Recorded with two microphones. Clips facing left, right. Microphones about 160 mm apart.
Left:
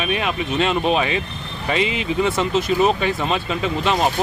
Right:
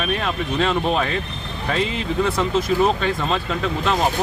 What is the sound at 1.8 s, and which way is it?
Speech, 80° left.